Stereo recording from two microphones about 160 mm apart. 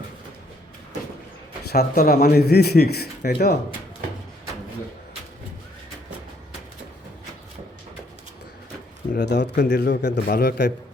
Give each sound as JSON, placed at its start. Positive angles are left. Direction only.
{"t": 1.7, "sound": "a man's voice", "side_deg": 80}
{"t": 9.1, "sound": "a man's voice", "side_deg": 90}